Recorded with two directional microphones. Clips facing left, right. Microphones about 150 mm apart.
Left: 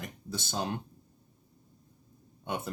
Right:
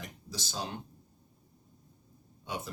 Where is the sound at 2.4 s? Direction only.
55° left (ahead or behind).